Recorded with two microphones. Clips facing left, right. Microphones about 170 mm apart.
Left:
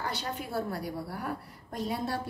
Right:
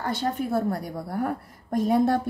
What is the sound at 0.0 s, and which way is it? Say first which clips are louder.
A woman's voice: right 8 dB; 50° right (ahead or behind).